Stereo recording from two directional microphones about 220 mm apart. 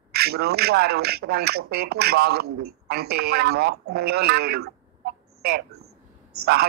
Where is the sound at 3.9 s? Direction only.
45° right (ahead or behind).